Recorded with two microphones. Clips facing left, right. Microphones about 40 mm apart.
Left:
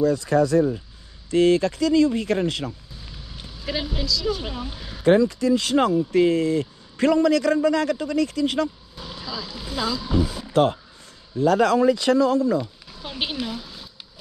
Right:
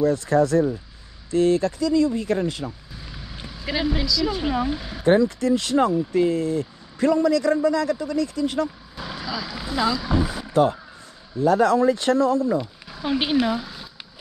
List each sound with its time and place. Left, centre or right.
0.1 s speech: right
1.3 s speech: left
3.4 s speech: centre
5.0 s a man's voice: left
8.9 s vehicle: centre
9.2 s speech: centre
9.8 s speech: right
11.3 s speech: left
12.4 s a sound: right
13.2 s speech: centre